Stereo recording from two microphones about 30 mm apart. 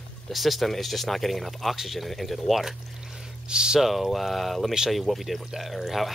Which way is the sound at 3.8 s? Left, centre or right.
Centre.